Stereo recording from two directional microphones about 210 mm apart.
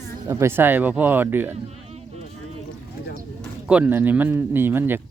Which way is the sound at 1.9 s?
30° right (ahead or behind).